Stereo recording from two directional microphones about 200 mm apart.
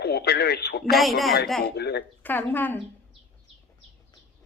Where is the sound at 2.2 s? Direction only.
10° left (ahead or behind).